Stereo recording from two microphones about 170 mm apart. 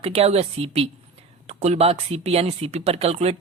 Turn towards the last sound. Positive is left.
turn(degrees=-35)  # may be behind; listen again after turning